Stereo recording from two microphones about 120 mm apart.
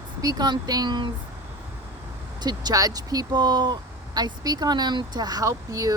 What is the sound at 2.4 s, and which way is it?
Speech, 30° right (ahead or behind).